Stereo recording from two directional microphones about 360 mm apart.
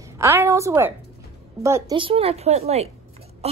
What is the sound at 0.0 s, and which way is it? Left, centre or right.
A woman's voice, centre.